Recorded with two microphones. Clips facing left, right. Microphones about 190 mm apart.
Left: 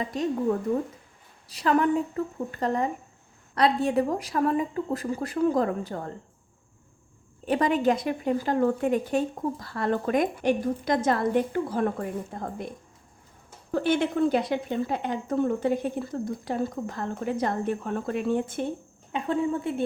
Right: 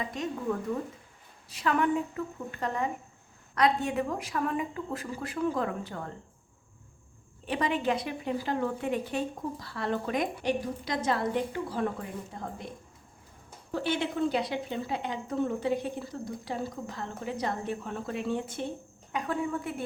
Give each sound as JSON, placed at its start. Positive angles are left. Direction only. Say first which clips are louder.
{"t": 0.0, "sound": "a woman's voice", "louder": "left 5 dB", "side_deg": 35}
{"t": 1.5, "sound": "a woman's voice", "louder": "left 4 dB", "side_deg": 35}
{"t": 7.4, "sound": "speech", "louder": "left 6 dB", "side_deg": 45}
{"t": 13.7, "sound": "speech", "louder": "left 6 dB", "side_deg": 50}
{"t": 19.1, "sound": "a woman's voice", "louder": "left 5 dB", "side_deg": 25}